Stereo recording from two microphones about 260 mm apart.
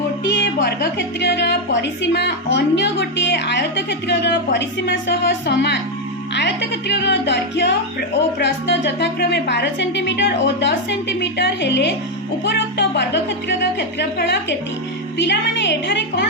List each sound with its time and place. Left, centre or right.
0.3 s a woman's voice: left